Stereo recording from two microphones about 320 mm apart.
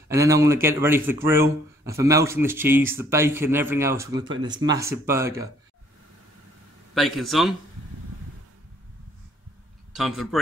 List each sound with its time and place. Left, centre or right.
0.1 s speech: centre
6.9 s a man's voice: centre
9.9 s a man's voice: centre